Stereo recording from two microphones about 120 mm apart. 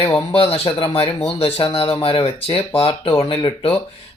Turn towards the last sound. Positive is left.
turn(degrees=45)  # may be behind; listen again after turning